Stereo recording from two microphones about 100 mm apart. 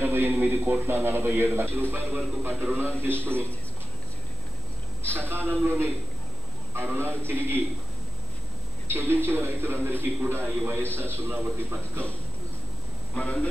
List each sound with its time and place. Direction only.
0.0 s a man's voice: 20° right (ahead or behind)
5.1 s a man's voice: 20° right (ahead or behind)
8.8 s a man's voice: 25° right (ahead or behind)
13.1 s speech: 15° left (ahead or behind)